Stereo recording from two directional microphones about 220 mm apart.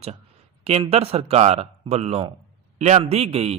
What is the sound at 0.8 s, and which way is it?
A man's voice, 25° right (ahead or behind).